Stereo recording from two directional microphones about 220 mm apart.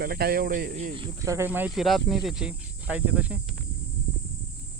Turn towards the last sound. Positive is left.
turn(degrees=-5)  # may be behind; listen again after turning